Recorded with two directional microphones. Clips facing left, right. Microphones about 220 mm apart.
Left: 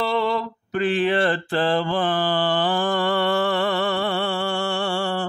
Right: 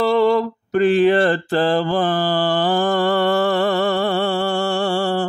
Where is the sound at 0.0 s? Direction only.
45° right (ahead or behind).